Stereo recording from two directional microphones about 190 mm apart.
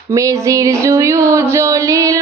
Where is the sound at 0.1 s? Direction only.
15° right (ahead or behind).